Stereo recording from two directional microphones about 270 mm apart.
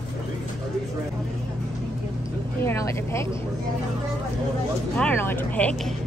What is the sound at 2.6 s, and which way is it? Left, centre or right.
Vehicle, centre.